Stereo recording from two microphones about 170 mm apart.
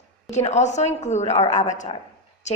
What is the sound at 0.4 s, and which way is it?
A woman's voice, 45° left (ahead or behind).